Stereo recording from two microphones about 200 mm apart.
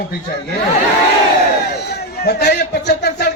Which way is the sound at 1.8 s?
55° left (ahead or behind).